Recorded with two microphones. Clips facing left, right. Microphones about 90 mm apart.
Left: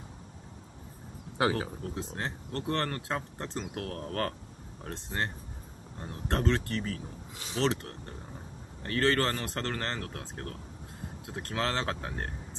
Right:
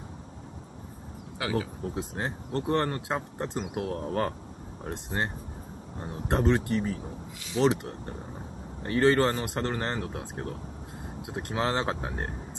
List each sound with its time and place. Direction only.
1.4 s speech: 35° left (ahead or behind)
2.0 s speech: 20° right (ahead or behind)